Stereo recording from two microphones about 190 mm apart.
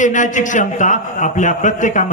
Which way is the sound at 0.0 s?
40° left (ahead or behind).